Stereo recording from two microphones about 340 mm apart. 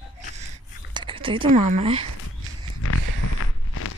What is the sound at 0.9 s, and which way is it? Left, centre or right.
Speech, centre.